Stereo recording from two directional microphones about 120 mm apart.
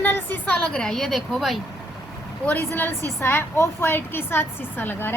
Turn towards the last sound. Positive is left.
turn(degrees=15)  # may be behind; listen again after turning